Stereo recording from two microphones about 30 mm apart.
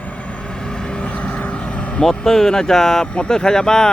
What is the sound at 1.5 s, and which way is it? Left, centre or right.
Vehicle, left.